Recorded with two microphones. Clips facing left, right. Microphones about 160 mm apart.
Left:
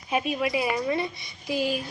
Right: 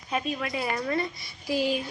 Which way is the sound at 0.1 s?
15° left (ahead or behind).